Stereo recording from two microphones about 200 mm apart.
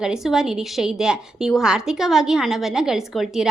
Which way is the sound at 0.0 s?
Centre (ahead or behind).